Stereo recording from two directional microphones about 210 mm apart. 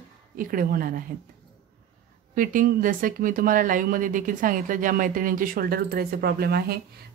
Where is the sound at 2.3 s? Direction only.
40° right (ahead or behind).